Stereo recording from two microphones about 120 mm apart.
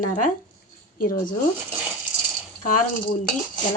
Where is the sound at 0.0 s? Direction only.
90° left.